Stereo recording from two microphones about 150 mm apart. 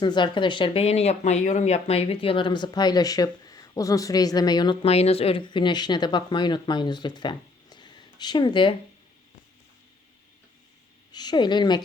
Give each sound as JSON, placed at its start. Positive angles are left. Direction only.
{"t": 0.0, "sound": "speech", "side_deg": 30}
{"t": 11.1, "sound": "a woman's voice", "side_deg": 30}